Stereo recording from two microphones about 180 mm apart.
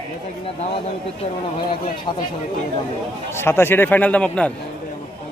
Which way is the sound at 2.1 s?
25° left (ahead or behind).